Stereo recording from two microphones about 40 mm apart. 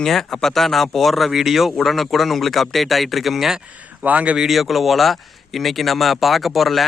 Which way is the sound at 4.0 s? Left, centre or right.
Right.